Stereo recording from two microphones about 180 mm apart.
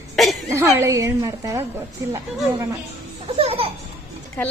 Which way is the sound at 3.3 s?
30° right (ahead or behind).